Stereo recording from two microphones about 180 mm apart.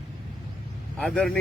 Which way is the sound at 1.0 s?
5° left (ahead or behind).